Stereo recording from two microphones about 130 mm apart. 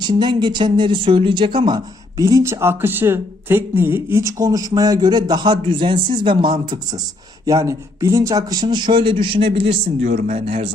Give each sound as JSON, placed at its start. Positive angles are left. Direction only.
{"t": 0.0, "sound": "speech", "side_deg": -35}
{"t": 2.2, "sound": "speech", "side_deg": -20}
{"t": 7.4, "sound": "speech", "side_deg": -25}